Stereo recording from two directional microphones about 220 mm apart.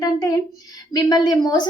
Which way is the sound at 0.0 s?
15° left (ahead or behind).